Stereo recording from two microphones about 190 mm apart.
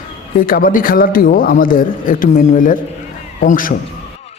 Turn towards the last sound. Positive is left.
turn(degrees=45)  # may be behind; listen again after turning